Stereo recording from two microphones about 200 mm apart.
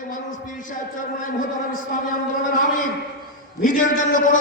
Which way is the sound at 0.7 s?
40° left (ahead or behind).